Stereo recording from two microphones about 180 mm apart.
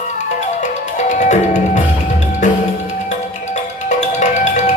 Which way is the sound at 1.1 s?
40° left (ahead or behind).